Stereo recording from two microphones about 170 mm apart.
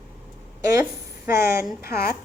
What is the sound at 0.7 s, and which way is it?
Speech, 15° right (ahead or behind).